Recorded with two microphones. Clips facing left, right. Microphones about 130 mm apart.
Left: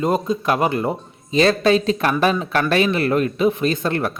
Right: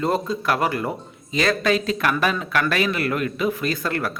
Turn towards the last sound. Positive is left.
turn(degrees=25)  # may be behind; listen again after turning